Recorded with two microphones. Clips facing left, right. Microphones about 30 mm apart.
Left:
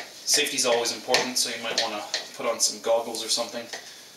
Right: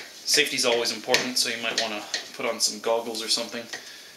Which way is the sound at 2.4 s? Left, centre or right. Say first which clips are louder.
Left 1 dB; right.